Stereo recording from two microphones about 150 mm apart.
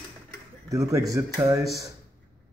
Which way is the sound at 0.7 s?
20° right (ahead or behind).